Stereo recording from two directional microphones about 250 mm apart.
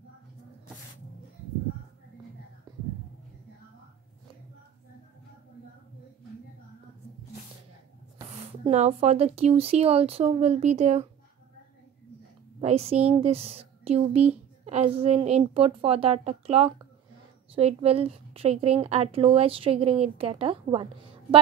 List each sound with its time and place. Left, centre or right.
8.6 s a woman's voice: right
12.5 s a woman's voice: right